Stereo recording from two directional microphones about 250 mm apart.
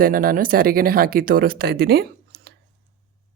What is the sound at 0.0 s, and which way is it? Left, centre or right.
Speech, right.